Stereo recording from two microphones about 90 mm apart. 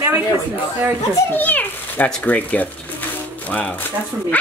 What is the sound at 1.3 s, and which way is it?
A child's voice, 20° left (ahead or behind).